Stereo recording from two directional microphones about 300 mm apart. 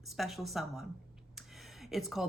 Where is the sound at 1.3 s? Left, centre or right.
Centre.